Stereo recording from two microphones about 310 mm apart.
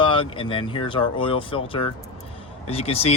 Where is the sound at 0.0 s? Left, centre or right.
Centre.